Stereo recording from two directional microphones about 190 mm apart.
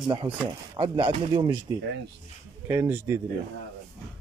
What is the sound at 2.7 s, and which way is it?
Speech, 10° right (ahead or behind).